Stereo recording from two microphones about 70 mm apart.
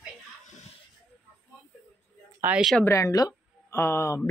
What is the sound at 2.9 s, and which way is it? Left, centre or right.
Speech, left.